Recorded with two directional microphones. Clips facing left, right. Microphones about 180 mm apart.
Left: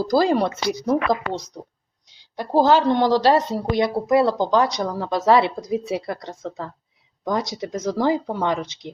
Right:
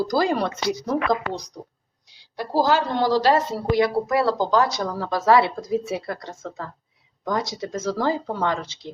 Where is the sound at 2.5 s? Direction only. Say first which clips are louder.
Left 4 dB; 20° left (ahead or behind).